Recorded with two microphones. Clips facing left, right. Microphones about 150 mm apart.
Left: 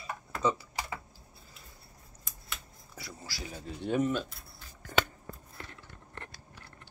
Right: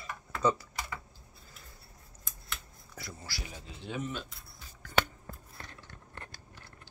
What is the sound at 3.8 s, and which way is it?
Speech, 50° left (ahead or behind).